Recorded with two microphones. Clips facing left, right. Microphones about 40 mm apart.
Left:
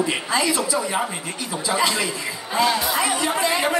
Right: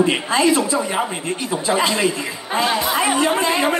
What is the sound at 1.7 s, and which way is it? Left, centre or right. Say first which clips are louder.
A man's voice: right 3 dB; right.